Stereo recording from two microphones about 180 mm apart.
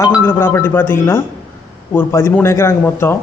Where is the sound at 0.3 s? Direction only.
10° left (ahead or behind).